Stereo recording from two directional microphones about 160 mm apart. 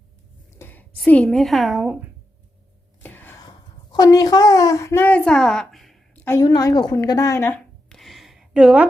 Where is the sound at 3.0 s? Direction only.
10° left (ahead or behind).